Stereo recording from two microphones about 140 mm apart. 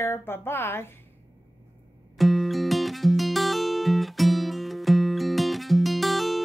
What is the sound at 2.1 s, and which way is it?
Music, centre (ahead or behind).